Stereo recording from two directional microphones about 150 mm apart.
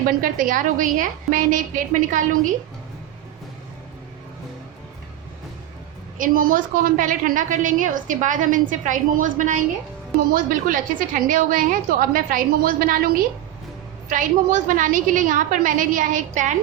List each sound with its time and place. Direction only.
0.2 s a woman's voice: 65° right (ahead or behind)
6.1 s a woman's voice: 65° right (ahead or behind)
14.1 s a woman's voice: 60° right (ahead or behind)